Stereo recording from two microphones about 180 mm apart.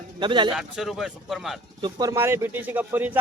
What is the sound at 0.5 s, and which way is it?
Speech, centre (ahead or behind).